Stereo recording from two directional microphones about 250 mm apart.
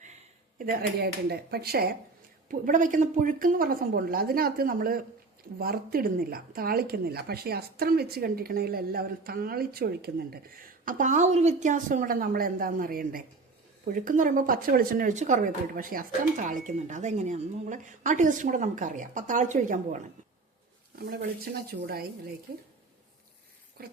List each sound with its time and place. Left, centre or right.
0.6 s speech: right
21.0 s speech: right
23.8 s speech: right